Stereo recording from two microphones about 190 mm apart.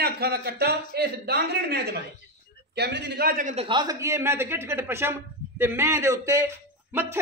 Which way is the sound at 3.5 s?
25° right (ahead or behind).